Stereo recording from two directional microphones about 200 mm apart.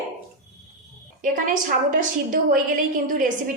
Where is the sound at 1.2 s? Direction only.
40° right (ahead or behind).